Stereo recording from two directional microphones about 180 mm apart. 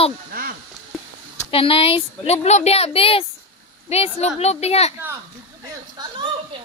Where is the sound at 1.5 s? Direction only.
30° left (ahead or behind).